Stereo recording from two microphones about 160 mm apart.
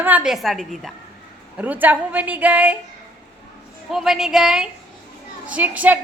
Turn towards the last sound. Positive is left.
turn(degrees=-10)  # may be behind; listen again after turning